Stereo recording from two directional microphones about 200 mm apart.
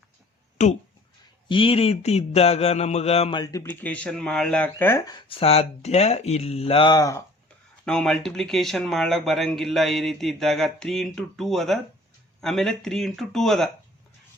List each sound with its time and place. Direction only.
1.5 s speech: 25° left (ahead or behind)
7.9 s speech: 5° left (ahead or behind)